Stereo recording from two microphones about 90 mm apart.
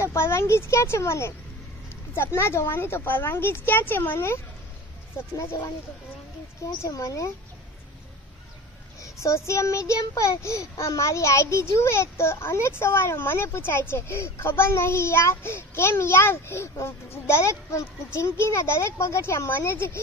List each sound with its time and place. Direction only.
0.0 s a child's voice: 30° left (ahead or behind)
6.8 s speech: 35° left (ahead or behind)
9.0 s a child's voice: 35° left (ahead or behind)